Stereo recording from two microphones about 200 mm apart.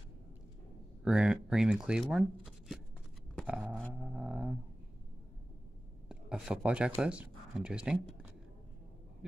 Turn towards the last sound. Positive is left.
turn(degrees=-5)  # may be behind; listen again after turning